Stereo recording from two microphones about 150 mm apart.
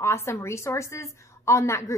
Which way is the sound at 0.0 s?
20° left (ahead or behind).